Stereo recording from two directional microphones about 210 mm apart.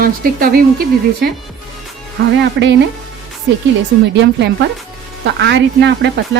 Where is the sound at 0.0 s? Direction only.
45° right (ahead or behind).